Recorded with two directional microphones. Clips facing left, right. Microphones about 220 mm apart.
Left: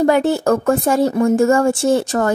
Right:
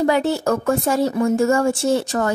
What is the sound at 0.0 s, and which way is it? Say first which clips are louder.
Speech: left 4 dB; 50° left (ahead or behind).